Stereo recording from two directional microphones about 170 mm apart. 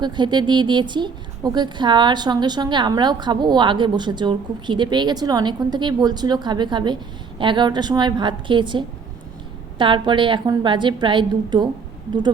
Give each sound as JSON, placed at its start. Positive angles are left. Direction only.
{"t": 0.0, "sound": "a woman's voice", "side_deg": -25}